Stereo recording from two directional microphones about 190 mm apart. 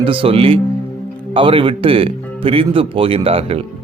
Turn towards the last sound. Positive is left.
turn(degrees=-30)  # may be behind; listen again after turning